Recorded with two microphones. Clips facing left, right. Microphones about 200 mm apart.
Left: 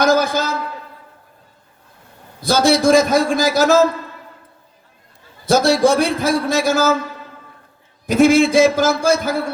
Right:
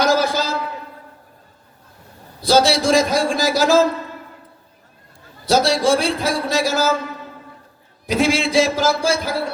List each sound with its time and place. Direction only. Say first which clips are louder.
0.0 s a sound: left 2 dB; 50° left (ahead or behind)
2.4 s a man's voice: left 1 dB; 50° left (ahead or behind)
5.5 s a man's voice: left 2 dB; 50° left (ahead or behind)
8.0 s a man's voice: left 6 dB; 50° left (ahead or behind)